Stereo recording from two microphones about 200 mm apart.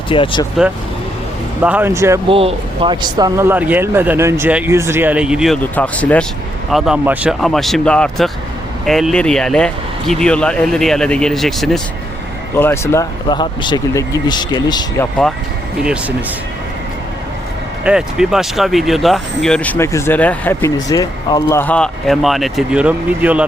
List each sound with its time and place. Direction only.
0.1 s speech: 25° left (ahead or behind)
1.6 s speech: 10° right (ahead or behind)
2.3 s speech: 30° right (ahead or behind); by 5.5 s 5° right (ahead or behind)
5.7 s speech: 5° left (ahead or behind)
12.5 s speech: 10° left (ahead or behind)
15.8 s speech: 5° right (ahead or behind)
17.8 s speech: 5° right (ahead or behind)